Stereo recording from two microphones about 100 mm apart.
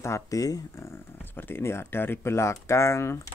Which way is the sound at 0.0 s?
30° left (ahead or behind).